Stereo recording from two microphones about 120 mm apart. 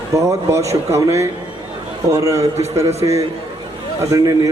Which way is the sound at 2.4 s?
65° right (ahead or behind).